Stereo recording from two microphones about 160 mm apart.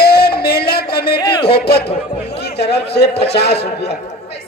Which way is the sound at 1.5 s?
80° left.